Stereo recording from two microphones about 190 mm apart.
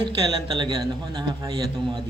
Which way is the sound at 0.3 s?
25° right (ahead or behind).